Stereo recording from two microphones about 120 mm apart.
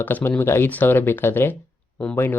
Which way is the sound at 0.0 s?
15° left (ahead or behind).